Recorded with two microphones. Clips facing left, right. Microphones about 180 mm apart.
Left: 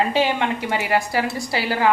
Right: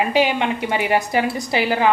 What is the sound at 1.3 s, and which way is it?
Cutlery, 20° right (ahead or behind).